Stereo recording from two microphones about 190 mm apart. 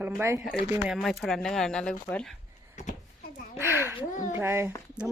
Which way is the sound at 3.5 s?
10° right (ahead or behind).